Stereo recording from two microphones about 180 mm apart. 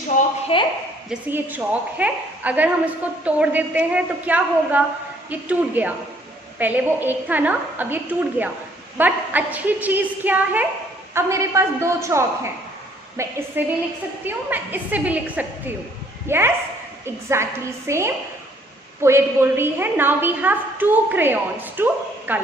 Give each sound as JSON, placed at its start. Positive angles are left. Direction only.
{"t": 0.5, "sound": "a woman's voice", "side_deg": 30}
{"t": 1.1, "sound": "a woman's voice", "side_deg": -10}